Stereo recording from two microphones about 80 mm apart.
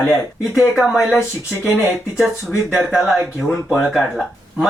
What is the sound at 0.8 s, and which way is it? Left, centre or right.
Speech, centre.